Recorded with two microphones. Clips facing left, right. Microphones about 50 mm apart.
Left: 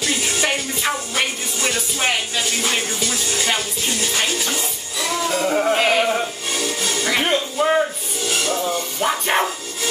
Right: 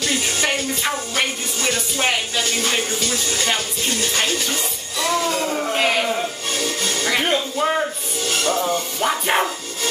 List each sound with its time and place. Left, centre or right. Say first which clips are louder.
0.0 s speech: even; centre
5.5 s speech: left 5 dB; centre
5.8 s music: left 2 dB; centre